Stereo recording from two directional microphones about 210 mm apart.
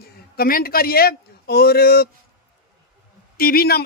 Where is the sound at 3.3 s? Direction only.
45° left (ahead or behind).